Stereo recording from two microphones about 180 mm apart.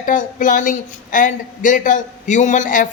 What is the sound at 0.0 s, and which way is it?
Speech, 45° left (ahead or behind).